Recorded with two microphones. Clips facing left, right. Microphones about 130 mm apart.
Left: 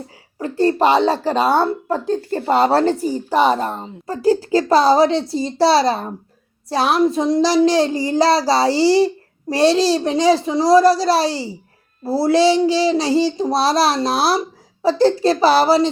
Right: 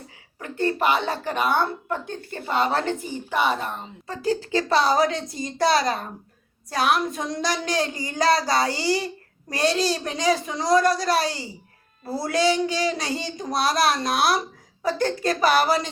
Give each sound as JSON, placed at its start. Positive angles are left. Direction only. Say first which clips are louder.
{"t": 0.3, "sound": "a woman's voice", "louder": "left 8 dB", "side_deg": 35}